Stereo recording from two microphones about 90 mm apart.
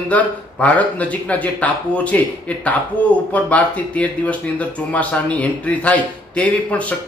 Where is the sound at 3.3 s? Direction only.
15° left (ahead or behind).